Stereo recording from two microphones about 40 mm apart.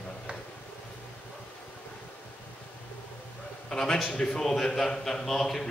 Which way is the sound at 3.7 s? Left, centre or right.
Centre.